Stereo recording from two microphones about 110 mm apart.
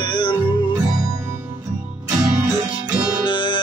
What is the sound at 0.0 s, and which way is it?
Music, 45° left (ahead or behind).